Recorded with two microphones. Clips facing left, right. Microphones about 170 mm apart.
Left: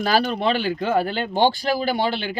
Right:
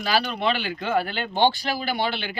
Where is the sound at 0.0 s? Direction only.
45° left (ahead or behind).